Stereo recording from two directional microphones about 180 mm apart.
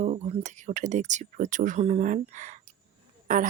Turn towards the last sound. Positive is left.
turn(degrees=-45)  # may be behind; listen again after turning